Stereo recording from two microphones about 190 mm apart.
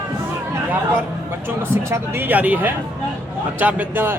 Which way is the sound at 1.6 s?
15° right (ahead or behind).